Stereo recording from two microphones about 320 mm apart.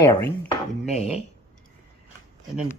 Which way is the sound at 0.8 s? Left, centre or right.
Centre.